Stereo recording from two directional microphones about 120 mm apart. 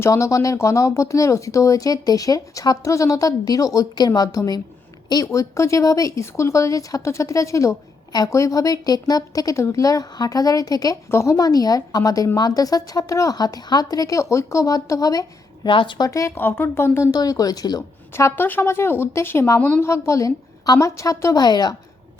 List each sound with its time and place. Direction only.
0.0 s speech: 25° left (ahead or behind)
15.7 s speech: 45° left (ahead or behind)
16.0 s speech: 25° left (ahead or behind)
17.1 s speech: 30° left (ahead or behind)